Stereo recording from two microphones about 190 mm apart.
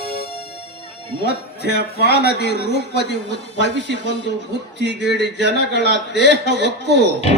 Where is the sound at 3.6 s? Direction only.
65° right (ahead or behind).